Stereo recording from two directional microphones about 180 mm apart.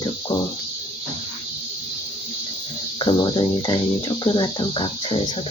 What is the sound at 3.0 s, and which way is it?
Speech, 25° left (ahead or behind).